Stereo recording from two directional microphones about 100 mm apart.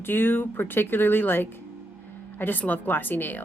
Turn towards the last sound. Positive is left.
turn(degrees=20)  # may be behind; listen again after turning